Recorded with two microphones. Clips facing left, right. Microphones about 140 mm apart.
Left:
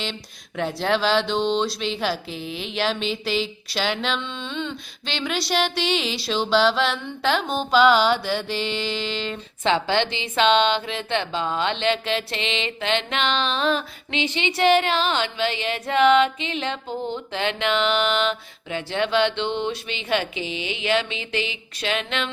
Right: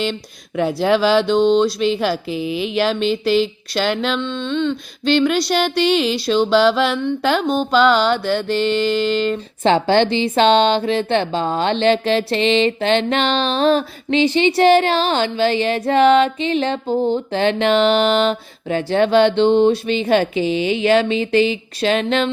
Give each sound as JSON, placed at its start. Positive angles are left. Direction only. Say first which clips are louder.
{"t": 0.0, "sound": "mantra", "louder": "right 9 dB", "side_deg": -5}
{"t": 9.6, "sound": "a woman's voice", "louder": "right 7 dB", "side_deg": -40}